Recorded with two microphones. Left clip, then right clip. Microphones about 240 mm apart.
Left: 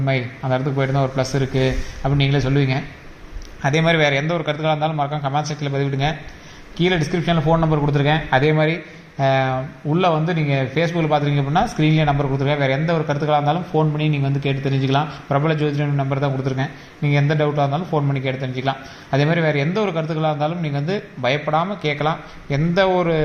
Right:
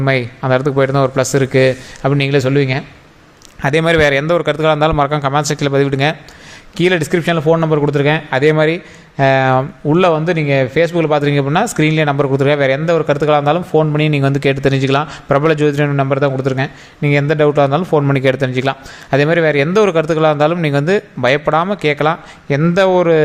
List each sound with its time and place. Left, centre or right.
0.0 s a man's voice: right